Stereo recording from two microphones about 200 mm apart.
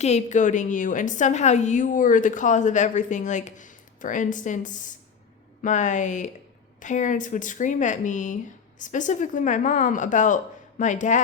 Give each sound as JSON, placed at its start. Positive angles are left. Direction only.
{"t": 0.0, "sound": "a woman's voice", "side_deg": 35}